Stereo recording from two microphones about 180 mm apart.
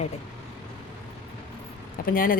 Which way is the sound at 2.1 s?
50° left (ahead or behind).